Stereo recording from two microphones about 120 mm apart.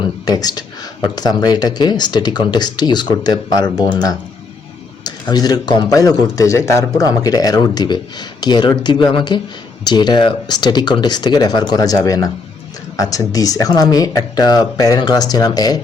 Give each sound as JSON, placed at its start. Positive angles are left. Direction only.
{"t": 0.3, "sound": "speech", "side_deg": 35}
{"t": 5.3, "sound": "speech", "side_deg": 35}